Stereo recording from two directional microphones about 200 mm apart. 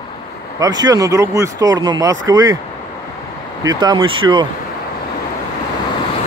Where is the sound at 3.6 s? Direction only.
20° right (ahead or behind).